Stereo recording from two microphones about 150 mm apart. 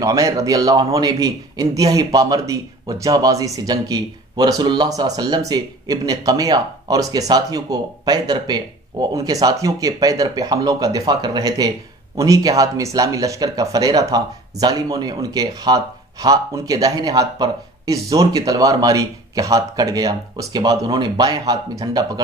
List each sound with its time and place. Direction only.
0.0 s speech: 20° right (ahead or behind)